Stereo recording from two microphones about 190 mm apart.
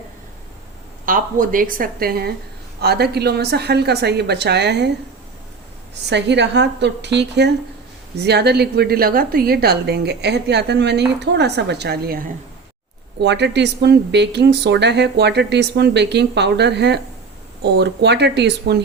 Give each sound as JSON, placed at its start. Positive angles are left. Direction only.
{"t": 1.0, "sound": "a woman's voice", "side_deg": -45}
{"t": 6.1, "sound": "a woman's voice", "side_deg": -65}
{"t": 13.2, "sound": "a woman's voice", "side_deg": -65}